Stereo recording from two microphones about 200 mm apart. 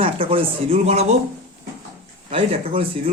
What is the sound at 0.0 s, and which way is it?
Speech, 25° right (ahead or behind).